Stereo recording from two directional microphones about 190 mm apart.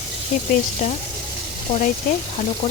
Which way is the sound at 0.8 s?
40° left (ahead or behind).